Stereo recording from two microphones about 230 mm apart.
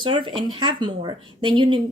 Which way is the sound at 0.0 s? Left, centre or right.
Right.